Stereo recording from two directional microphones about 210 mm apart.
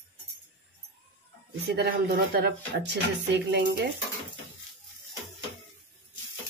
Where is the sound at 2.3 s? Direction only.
50° right (ahead or behind).